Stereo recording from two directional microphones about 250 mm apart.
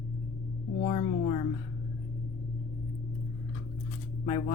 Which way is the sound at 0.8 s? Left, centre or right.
Left.